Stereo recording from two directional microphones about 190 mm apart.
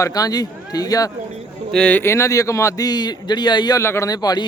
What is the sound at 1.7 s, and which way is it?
A man's voice, 5° left (ahead or behind).